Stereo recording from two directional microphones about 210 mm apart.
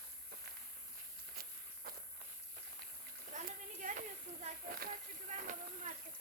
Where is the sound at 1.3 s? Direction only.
45° right (ahead or behind).